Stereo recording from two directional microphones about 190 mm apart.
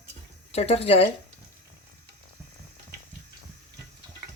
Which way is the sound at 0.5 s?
30° left (ahead or behind).